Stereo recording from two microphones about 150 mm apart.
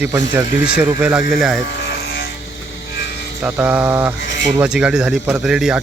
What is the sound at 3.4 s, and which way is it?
Speech, 10° right (ahead or behind).